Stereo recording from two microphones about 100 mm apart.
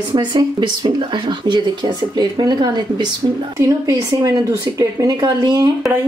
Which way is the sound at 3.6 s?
35° right (ahead or behind).